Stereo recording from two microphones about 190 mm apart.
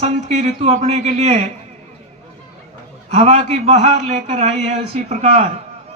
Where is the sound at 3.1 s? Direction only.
35° right (ahead or behind).